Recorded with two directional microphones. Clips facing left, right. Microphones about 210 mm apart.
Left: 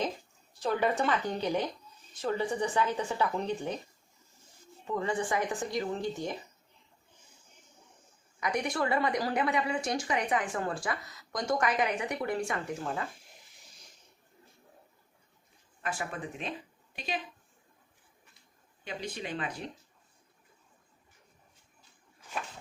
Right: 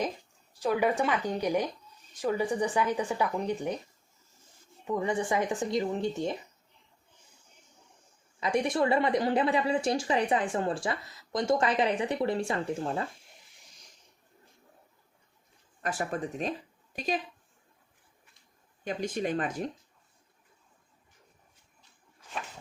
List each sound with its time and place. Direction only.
0.6 s speech: 10° right (ahead or behind)
4.9 s speech: 20° right (ahead or behind)
8.4 s speech: 25° right (ahead or behind)
15.8 s speech: 40° right (ahead or behind)
18.9 s speech: 45° right (ahead or behind)